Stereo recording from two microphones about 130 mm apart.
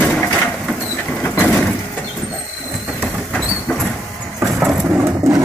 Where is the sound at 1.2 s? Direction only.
10° left (ahead or behind).